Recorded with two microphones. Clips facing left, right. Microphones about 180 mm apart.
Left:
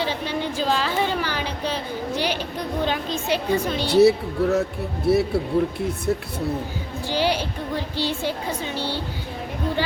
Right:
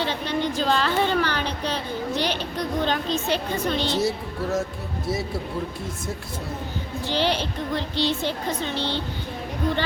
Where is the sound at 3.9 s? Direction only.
70° left (ahead or behind).